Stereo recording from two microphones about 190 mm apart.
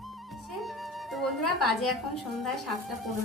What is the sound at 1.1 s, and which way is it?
Music, centre (ahead or behind).